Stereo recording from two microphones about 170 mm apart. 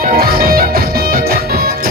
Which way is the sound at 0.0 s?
60° right (ahead or behind).